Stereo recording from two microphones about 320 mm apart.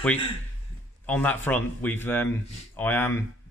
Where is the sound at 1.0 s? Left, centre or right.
Centre.